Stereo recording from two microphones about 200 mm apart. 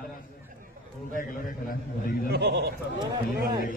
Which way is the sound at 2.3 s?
60° right (ahead or behind).